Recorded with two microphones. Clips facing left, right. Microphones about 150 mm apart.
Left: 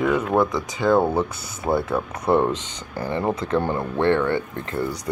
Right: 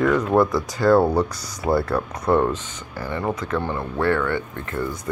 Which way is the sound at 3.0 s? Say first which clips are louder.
Left 2 dB; 25° left (ahead or behind).